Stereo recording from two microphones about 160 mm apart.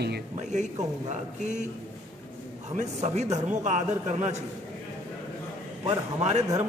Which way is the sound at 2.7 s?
45° right (ahead or behind).